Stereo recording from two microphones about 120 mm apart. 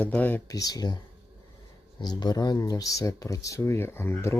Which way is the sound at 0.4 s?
30° left (ahead or behind).